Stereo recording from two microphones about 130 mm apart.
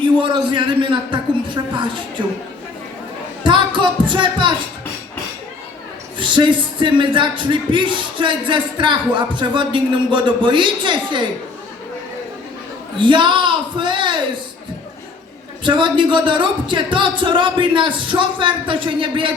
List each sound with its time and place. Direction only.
0.0 s speech: 40° right (ahead or behind)
3.4 s speech: 40° right (ahead or behind)
6.1 s speech: 40° right (ahead or behind)
13.0 s speech: 40° right (ahead or behind)
15.6 s speech: 40° right (ahead or behind)